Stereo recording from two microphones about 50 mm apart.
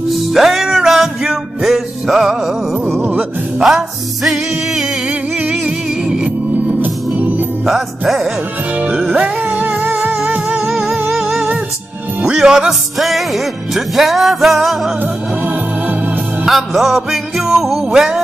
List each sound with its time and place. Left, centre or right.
0.1 s music: centre
3.6 s music: centre
6.0 s music: centre
6.7 s music: right
7.6 s music: centre
8.7 s music: right
9.5 s music: right
10.6 s music: centre
12.2 s speech: centre
12.9 s music: centre
16.4 s music: centre